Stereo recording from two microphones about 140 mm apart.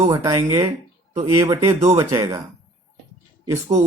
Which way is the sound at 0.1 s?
25° right (ahead or behind).